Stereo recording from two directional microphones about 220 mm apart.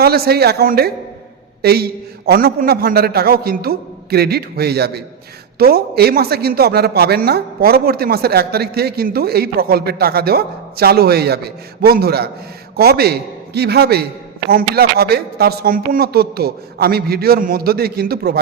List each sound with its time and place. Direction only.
0.0 s speech: 45° right (ahead or behind)